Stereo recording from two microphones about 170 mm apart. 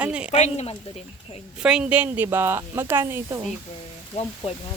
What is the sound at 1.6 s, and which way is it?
Speech, 5° right (ahead or behind).